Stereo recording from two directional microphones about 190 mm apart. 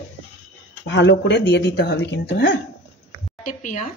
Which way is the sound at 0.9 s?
70° left (ahead or behind).